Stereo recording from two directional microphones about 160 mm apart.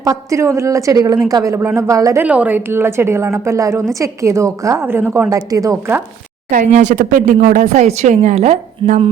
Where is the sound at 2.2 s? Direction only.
10° right (ahead or behind).